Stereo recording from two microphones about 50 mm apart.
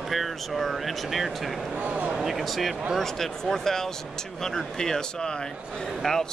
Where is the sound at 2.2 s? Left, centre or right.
Centre.